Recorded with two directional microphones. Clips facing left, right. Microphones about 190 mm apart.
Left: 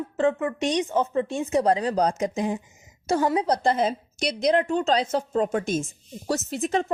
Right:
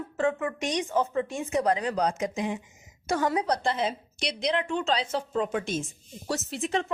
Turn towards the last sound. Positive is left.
turn(degrees=45)  # may be behind; listen again after turning